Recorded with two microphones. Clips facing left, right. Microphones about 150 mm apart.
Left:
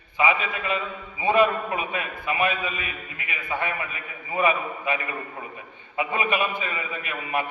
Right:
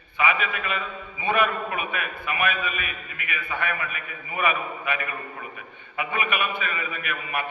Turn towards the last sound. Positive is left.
turn(degrees=25)  # may be behind; listen again after turning